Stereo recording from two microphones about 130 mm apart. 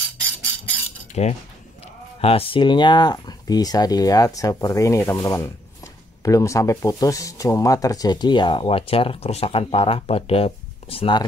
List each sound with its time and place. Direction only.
1.2 s speech: 60° left (ahead or behind)
2.2 s speech: 45° left (ahead or behind)